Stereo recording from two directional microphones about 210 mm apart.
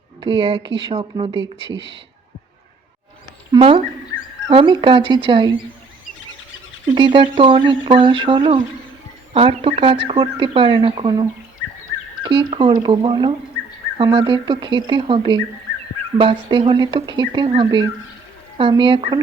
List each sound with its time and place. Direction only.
0.2 s speech: 20° right (ahead or behind)
3.5 s speech: 25° right (ahead or behind)
6.9 s speech: 25° right (ahead or behind)